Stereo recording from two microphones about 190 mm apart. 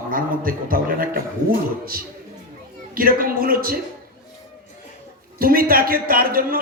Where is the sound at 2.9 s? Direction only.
50° right (ahead or behind).